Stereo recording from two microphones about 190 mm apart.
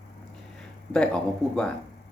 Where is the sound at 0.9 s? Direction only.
5° left (ahead or behind).